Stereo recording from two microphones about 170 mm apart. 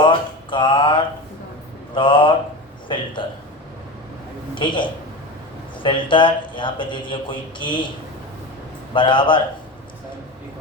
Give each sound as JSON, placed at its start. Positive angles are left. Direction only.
{"t": 0.0, "sound": "mantra", "side_deg": 30}
{"t": 2.0, "sound": "a sound", "side_deg": 30}
{"t": 4.5, "sound": "speech", "side_deg": 30}
{"t": 8.9, "sound": "speech", "side_deg": 30}